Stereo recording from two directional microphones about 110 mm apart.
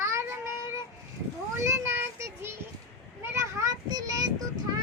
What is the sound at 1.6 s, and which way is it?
Child singing, 25° right (ahead or behind).